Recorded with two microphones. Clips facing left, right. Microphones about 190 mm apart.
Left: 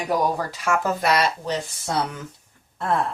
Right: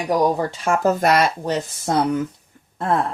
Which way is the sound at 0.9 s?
50° right (ahead or behind).